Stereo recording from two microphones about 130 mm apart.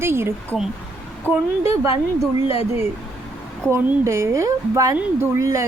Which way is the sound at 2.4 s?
50° left (ahead or behind).